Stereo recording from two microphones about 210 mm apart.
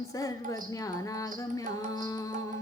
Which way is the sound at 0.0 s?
15° left (ahead or behind).